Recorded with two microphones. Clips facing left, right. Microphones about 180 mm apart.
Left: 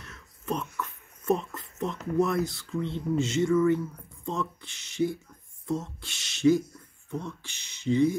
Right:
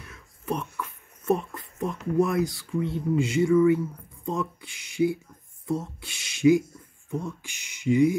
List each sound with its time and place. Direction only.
0.0 s speech: 10° right (ahead or behind)